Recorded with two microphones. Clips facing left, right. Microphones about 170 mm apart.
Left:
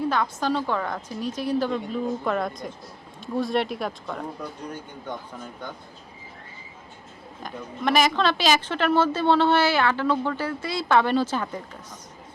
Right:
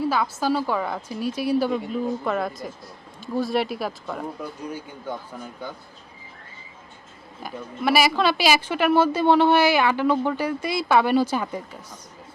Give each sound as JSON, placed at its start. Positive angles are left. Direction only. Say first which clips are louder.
{"t": 0.1, "sound": "speech", "louder": "right 2 dB", "side_deg": -5}
{"t": 7.4, "sound": "speech", "louder": "right 2 dB", "side_deg": -5}